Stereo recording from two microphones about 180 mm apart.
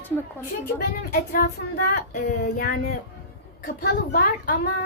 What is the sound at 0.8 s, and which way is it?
A woman's voice, 55° left (ahead or behind).